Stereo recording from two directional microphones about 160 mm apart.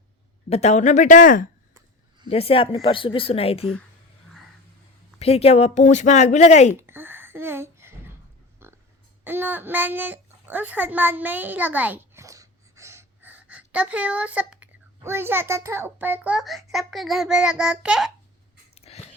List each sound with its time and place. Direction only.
0.5 s speech: 45° left (ahead or behind)
2.3 s speech: 35° left (ahead or behind)
5.2 s speech: 40° left (ahead or behind)
6.7 s a sound: 15° right (ahead or behind)
9.2 s a child's voice: 10° right (ahead or behind)
18.7 s a sound: 40° left (ahead or behind)